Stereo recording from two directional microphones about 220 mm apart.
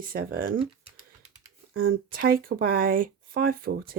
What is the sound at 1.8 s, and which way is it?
Speech, 40° right (ahead or behind).